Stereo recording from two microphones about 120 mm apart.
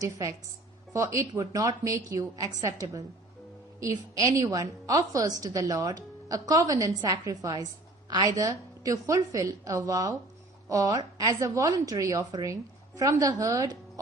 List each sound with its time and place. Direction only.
0.0 s a woman's voice: 30° right (ahead or behind)